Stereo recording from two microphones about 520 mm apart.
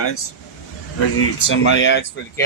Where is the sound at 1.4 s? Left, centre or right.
Left.